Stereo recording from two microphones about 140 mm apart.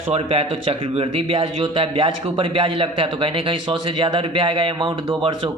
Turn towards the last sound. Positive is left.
turn(degrees=-40)  # may be behind; listen again after turning